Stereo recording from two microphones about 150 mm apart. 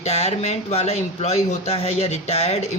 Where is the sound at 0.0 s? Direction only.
45° left (ahead or behind).